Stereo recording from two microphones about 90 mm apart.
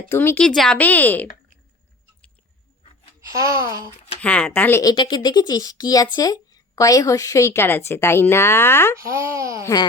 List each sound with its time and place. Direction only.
0.1 s speech: 25° left (ahead or behind)
0.3 s speech: 5° left (ahead or behind)
0.8 s speech: 20° left (ahead or behind)
3.2 s speech: 35° right (ahead or behind)
4.2 s speech: 15° left (ahead or behind)
4.9 s speech: 60° left (ahead or behind); by 9.0 s 25° left (ahead or behind)
9.0 s speech: 35° right (ahead or behind)